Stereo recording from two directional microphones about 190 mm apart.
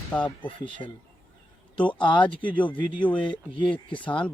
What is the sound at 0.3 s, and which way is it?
Speech, 25° left (ahead or behind).